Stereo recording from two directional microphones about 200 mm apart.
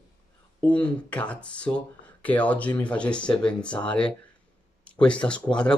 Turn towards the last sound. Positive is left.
turn(degrees=5)  # may be behind; listen again after turning